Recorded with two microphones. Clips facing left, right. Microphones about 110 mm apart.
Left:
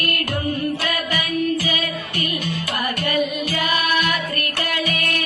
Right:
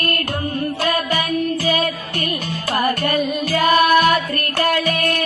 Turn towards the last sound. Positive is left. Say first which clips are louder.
# right 6 dB
turn(degrees=-40)  # may be behind; listen again after turning